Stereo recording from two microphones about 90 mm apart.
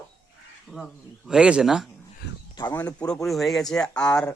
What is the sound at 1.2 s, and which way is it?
Speech, 10° right (ahead or behind).